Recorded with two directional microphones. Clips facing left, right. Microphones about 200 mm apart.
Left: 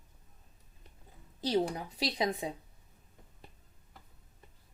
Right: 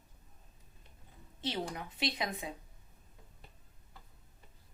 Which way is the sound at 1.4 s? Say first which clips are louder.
Left 7 dB; 35° left (ahead or behind).